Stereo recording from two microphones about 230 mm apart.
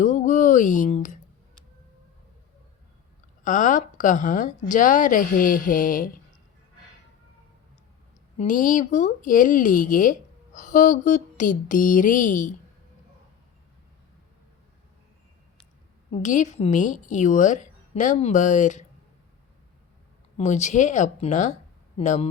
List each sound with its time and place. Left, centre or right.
0.0 s a sound: left
3.4 s speech: left
8.4 s speech: left
16.1 s speech: left
20.3 s speech: left